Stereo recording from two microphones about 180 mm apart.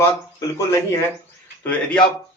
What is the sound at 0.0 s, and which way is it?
A man's voice, 15° left (ahead or behind).